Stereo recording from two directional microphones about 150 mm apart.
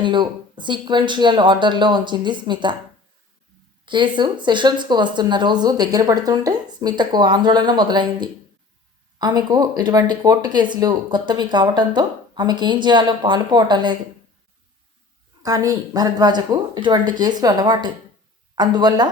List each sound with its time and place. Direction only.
0.0 s speech: 30° right (ahead or behind)
3.8 s speech: 30° right (ahead or behind)
15.4 s speech: 25° right (ahead or behind)